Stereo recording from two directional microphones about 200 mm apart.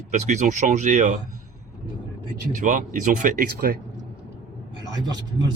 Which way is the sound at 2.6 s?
40° right (ahead or behind).